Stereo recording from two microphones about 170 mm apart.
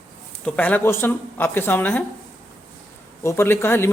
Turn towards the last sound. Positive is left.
turn(degrees=15)  # may be behind; listen again after turning